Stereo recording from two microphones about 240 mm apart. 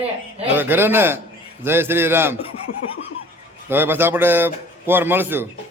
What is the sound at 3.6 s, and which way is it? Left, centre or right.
A man's voice, centre.